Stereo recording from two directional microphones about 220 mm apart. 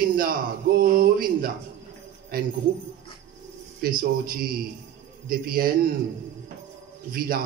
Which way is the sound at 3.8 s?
40° right (ahead or behind).